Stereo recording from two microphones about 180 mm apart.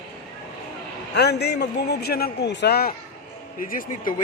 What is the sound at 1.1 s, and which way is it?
A man's voice, 65° left (ahead or behind).